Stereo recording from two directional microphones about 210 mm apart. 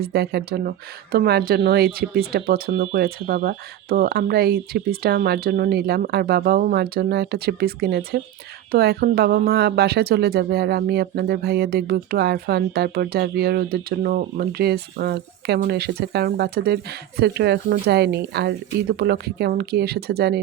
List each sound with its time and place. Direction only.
0.0 s speech: 50° right (ahead or behind)